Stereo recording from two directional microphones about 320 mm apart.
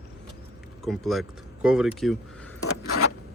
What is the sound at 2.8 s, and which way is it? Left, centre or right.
Zipper, left.